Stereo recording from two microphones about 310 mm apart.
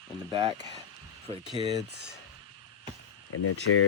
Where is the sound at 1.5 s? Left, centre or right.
Centre.